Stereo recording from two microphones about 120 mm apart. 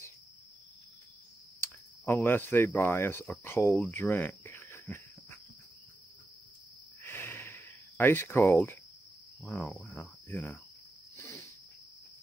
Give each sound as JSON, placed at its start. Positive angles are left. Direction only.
{"t": 1.6, "sound": "speech", "side_deg": 20}
{"t": 4.0, "sound": "cricket", "side_deg": 20}
{"t": 7.0, "sound": "snort", "side_deg": 20}
{"t": 9.4, "sound": "cricket", "side_deg": 15}
{"t": 11.1, "sound": "a sound", "side_deg": 25}